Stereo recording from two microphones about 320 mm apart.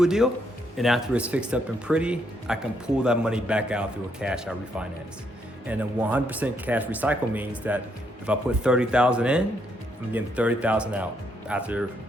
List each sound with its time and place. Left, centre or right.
0.0 s speech: centre